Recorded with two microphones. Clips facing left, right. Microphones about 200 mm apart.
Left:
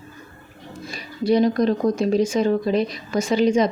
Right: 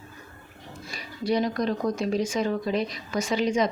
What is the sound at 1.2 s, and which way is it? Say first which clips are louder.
A woman's voice: left 7 dB; 30° left (ahead or behind).